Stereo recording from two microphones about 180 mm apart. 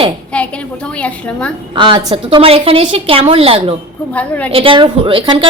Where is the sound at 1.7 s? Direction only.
25° right (ahead or behind).